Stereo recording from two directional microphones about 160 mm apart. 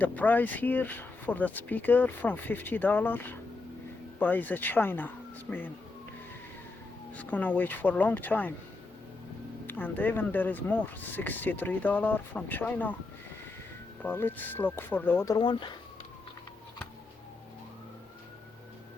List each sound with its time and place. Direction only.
0.0 s speech: 10° left (ahead or behind)
7.2 s speech: 10° left (ahead or behind)
9.6 s speech: 10° left (ahead or behind)
14.0 s speech: 10° left (ahead or behind)
15.4 s speech: 30° left (ahead or behind)